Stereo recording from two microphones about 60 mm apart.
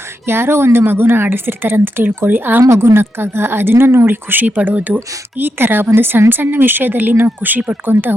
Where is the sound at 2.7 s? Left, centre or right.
Right.